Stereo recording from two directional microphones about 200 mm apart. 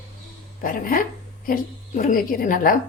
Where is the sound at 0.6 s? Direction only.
45° left (ahead or behind).